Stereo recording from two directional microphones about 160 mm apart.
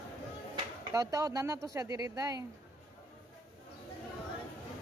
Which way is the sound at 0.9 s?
20° right (ahead or behind).